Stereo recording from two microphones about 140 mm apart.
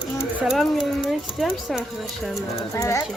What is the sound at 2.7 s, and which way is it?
Speech, 25° left (ahead or behind).